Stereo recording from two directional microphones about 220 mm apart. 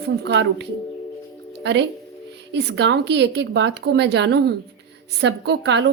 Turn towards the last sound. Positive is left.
turn(degrees=-50)  # may be behind; listen again after turning